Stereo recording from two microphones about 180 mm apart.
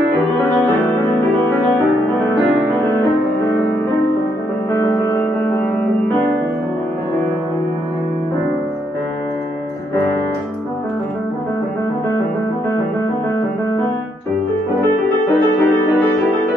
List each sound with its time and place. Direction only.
0.4 s music: 10° left (ahead or behind)
3.0 s music: 15° left (ahead or behind)
4.7 s music: 20° left (ahead or behind)
15.2 s music: 15° left (ahead or behind)